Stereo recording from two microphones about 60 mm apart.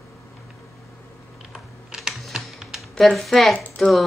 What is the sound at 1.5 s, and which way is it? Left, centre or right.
Computer keyboard, centre.